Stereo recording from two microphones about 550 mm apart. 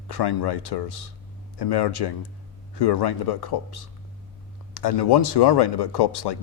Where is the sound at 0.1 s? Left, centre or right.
Left.